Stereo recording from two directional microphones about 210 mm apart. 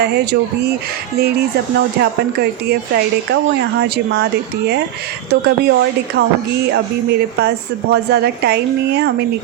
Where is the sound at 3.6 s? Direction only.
50° right (ahead or behind).